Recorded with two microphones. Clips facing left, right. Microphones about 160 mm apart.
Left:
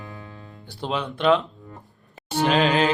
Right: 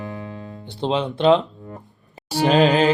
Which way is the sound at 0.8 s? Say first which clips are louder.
Right 4 dB; 25° right (ahead or behind).